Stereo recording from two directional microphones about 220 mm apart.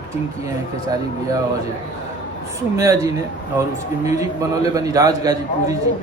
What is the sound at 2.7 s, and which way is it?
A man's voice, 15° right (ahead or behind).